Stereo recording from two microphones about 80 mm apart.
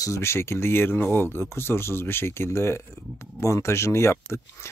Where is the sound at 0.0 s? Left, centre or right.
Left.